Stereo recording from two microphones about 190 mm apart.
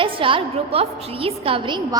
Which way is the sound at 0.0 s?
25° right (ahead or behind).